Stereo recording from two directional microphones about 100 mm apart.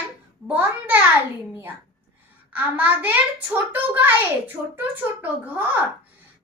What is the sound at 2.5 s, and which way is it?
A child's voice, 15° right (ahead or behind).